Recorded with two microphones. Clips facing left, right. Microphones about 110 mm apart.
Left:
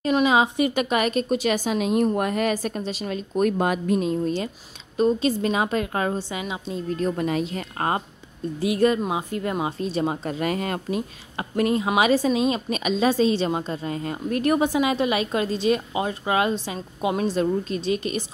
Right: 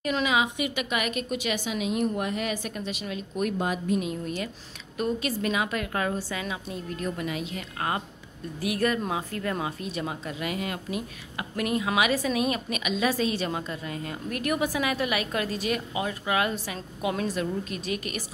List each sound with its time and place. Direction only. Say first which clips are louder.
0.0 s a woman's voice: left 6 dB; 30° left (ahead or behind)
3.5 s speech: left 5 dB; 60° left (ahead or behind)
4.0 s a woman's voice: left 7 dB; 30° left (ahead or behind)
7.1 s a woman's voice: left 6 dB; 40° left (ahead or behind)
8.5 s a woman's voice: left 6 dB; 25° left (ahead or behind); by 11.0 s 40° left (ahead or behind)
11.0 s a woman's voice: left 5 dB; 30° left (ahead or behind)